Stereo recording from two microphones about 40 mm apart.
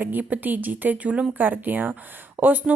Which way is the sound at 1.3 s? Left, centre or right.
Right.